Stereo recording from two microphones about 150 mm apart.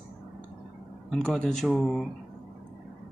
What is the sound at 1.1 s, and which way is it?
Speech, 5° left (ahead or behind).